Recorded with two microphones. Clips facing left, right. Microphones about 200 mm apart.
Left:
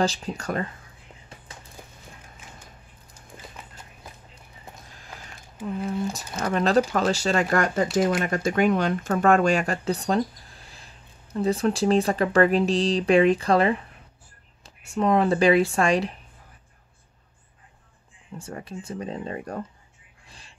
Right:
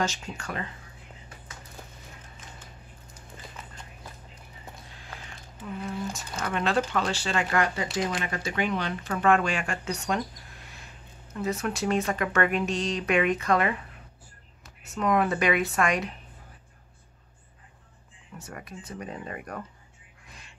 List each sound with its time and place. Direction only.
0.0 s speech: 35° left (ahead or behind)
6.1 s speech: 40° left (ahead or behind)
18.4 s speech: 30° left (ahead or behind)
20.2 s a sound: 30° left (ahead or behind)